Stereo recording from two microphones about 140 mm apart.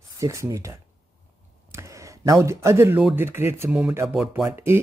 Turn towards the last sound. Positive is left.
turn(degrees=-15)  # may be behind; listen again after turning